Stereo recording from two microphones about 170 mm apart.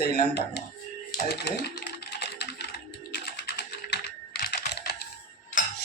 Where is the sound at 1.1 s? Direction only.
70° left (ahead or behind).